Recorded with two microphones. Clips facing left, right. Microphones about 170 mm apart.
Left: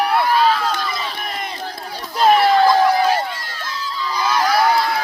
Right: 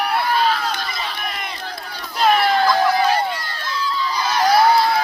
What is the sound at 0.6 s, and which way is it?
Crowd, 45° left (ahead or behind).